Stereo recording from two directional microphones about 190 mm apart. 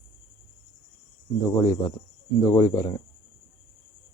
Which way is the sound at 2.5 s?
20° left (ahead or behind).